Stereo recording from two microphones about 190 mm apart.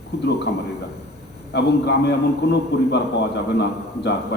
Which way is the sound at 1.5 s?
60° left (ahead or behind).